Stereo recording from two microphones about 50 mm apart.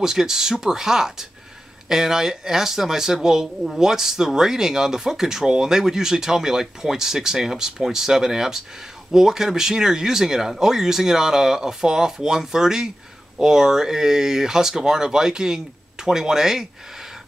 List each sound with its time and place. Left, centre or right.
0.0 s speech: centre